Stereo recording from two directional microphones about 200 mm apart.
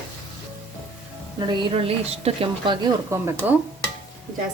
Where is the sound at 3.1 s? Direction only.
15° right (ahead or behind).